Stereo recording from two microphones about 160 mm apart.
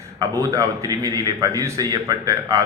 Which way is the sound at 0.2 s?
20° right (ahead or behind).